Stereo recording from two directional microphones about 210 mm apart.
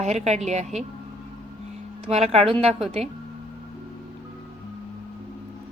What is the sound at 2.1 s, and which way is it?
A woman's voice, 30° right (ahead or behind).